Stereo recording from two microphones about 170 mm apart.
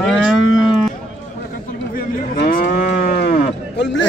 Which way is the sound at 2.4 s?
55° left (ahead or behind).